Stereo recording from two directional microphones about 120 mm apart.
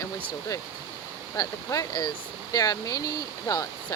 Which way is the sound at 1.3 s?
30° left (ahead or behind).